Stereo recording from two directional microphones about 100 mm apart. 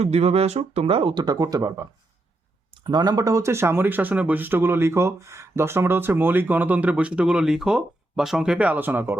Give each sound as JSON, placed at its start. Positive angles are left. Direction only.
{"t": 0.0, "sound": "speech", "side_deg": -90}
{"t": 1.2, "sound": "speech", "side_deg": -40}
{"t": 2.8, "sound": "speech", "side_deg": -45}